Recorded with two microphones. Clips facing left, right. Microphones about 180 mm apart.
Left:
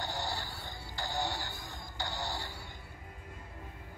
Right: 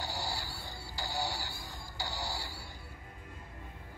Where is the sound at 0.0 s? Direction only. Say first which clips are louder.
Left 1 dB; 10° right (ahead or behind).